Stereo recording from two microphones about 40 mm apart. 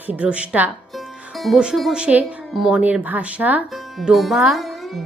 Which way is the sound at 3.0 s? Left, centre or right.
Right.